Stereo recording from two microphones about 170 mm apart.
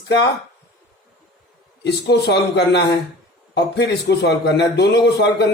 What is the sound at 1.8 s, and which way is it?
Speech, 75° left (ahead or behind).